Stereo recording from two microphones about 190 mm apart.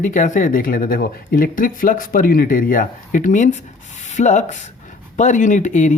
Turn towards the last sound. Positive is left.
turn(degrees=40)  # may be behind; listen again after turning